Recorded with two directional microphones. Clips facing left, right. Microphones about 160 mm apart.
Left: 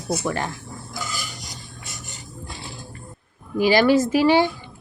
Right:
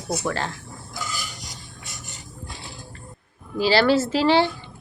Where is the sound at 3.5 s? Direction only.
15° left (ahead or behind).